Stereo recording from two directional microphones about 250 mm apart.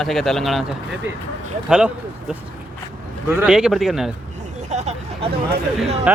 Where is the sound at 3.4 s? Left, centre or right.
Centre.